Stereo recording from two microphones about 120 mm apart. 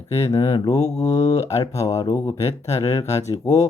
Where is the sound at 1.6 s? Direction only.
25° left (ahead or behind).